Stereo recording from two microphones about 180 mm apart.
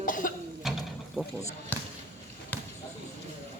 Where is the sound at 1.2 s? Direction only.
5° right (ahead or behind).